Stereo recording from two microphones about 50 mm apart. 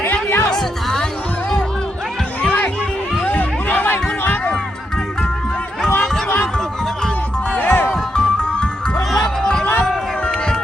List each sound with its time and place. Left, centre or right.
0.0 s music: left
0.5 s music: centre
2.4 s a sound: left
3.2 s crowd: left
3.9 s a sound: left
6.2 s music: left
7.6 s music: left
8.1 s music: centre